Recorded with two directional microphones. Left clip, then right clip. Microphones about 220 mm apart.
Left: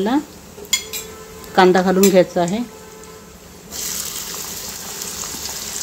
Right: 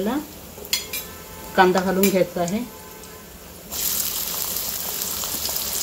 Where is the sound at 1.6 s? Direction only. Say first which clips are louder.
Left 5 dB; 45° left (ahead or behind).